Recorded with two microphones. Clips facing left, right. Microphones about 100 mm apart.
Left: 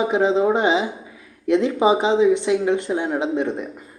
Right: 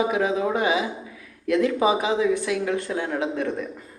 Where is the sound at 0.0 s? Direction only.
25° left (ahead or behind).